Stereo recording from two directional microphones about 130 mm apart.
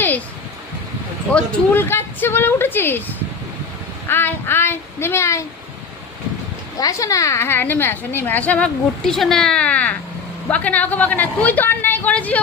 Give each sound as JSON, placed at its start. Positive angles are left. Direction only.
{"t": 1.3, "sound": "a woman's voice", "side_deg": 10}
{"t": 6.7, "sound": "a woman's voice", "side_deg": 25}